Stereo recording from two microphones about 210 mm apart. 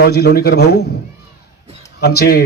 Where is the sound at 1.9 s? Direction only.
50° left (ahead or behind).